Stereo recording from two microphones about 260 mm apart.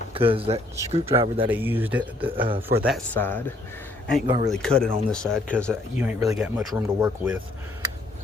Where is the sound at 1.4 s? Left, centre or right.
Centre.